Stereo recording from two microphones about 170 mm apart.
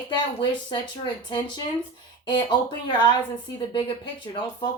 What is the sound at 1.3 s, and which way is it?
Speech, 25° left (ahead or behind).